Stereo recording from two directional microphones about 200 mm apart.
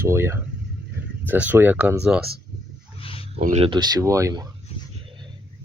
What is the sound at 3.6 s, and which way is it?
Speech, 20° right (ahead or behind).